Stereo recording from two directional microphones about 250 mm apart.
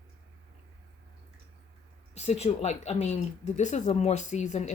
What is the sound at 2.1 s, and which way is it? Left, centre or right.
Speech, left.